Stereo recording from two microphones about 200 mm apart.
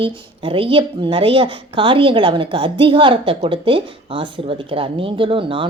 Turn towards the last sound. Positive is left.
turn(degrees=-25)  # may be behind; listen again after turning